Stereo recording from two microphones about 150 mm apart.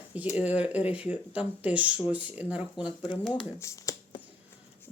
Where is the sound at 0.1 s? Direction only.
10° right (ahead or behind).